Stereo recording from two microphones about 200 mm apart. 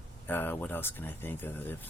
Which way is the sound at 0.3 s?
10° left (ahead or behind).